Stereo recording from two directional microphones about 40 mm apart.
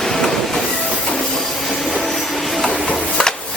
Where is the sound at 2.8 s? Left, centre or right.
Left.